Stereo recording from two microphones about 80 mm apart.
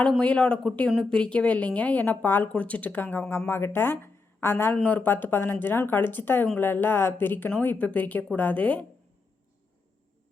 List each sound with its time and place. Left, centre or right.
0.2 s a woman's voice: centre
4.0 s a sound: left
4.7 s a woman's voice: centre